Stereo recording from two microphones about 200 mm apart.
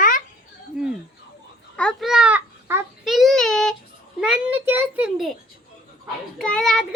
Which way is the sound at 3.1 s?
Centre (ahead or behind).